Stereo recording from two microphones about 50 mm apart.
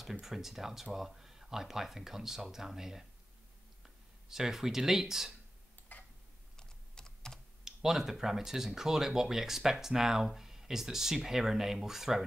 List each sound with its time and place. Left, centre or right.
0.2 s speech: centre
5.9 s tick-tock: left
6.5 s typing: centre
7.6 s speech: centre